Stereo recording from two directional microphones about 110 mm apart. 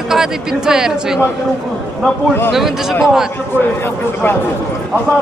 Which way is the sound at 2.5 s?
5° right (ahead or behind).